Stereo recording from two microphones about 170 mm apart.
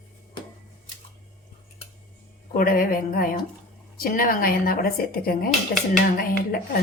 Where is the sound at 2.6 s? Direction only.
55° left (ahead or behind).